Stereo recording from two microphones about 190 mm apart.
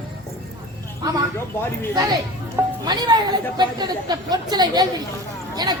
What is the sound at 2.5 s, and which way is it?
Music, 20° right (ahead or behind).